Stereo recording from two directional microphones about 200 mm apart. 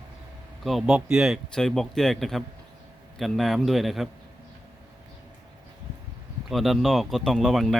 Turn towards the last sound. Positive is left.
turn(degrees=0)  # may be behind; listen again after turning